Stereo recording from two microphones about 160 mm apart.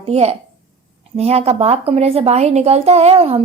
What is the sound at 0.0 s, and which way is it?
A woman's voice, 40° right (ahead or behind).